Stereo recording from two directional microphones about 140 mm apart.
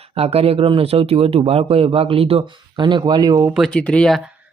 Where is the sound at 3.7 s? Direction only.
10° left (ahead or behind).